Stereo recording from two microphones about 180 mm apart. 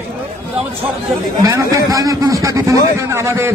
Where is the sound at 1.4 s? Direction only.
20° right (ahead or behind).